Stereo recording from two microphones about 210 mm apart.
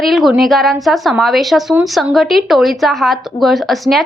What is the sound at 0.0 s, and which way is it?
A woman's voice, centre (ahead or behind).